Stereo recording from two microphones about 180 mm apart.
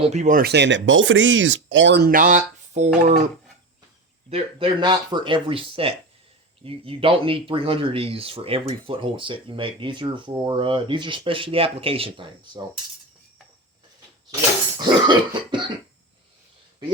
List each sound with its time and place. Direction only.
0.0 s speech: 40° right (ahead or behind)
4.3 s speech: 30° right (ahead or behind)
14.8 s speech: 25° right (ahead or behind)